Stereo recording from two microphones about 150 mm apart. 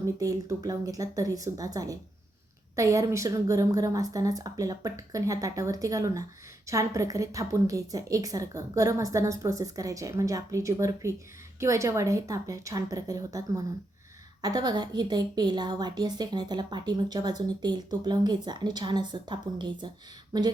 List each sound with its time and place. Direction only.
0.0 s a woman's voice: 20° right (ahead or behind)